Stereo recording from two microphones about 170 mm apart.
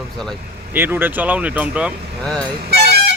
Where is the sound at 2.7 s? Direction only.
70° right (ahead or behind).